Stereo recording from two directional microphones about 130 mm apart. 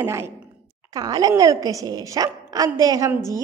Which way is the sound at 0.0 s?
20° right (ahead or behind).